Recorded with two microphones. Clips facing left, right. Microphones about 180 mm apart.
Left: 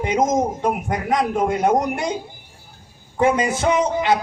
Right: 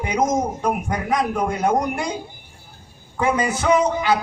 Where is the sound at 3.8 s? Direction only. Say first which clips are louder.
Left 1 dB; 25° left (ahead or behind).